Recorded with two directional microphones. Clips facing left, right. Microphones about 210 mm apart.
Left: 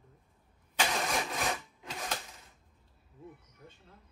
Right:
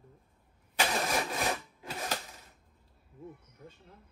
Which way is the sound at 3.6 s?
20° right (ahead or behind).